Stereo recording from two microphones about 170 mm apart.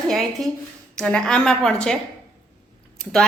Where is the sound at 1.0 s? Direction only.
5° left (ahead or behind).